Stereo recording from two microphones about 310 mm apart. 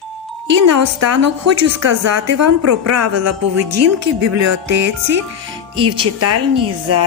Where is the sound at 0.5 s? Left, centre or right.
Right.